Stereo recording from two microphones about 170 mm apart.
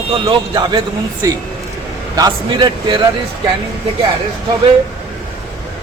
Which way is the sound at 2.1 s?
20° right (ahead or behind).